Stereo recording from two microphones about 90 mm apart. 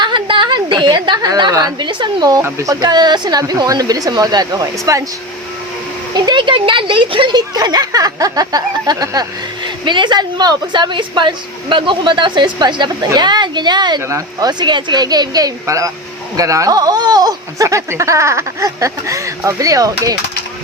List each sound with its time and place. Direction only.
0.0 s a sound: 65° right (ahead or behind); by 1.9 s 45° right (ahead or behind)
1.9 s speech: 55° right (ahead or behind)
2.4 s speech: 35° right (ahead or behind)
2.8 s speech: 50° right (ahead or behind)
6.1 s speech: 55° right (ahead or behind)
9.6 s speech: 60° right (ahead or behind); by 20.1 s 40° right (ahead or behind)